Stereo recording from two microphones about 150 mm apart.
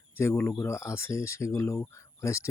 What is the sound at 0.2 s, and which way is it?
Speech, 15° left (ahead or behind).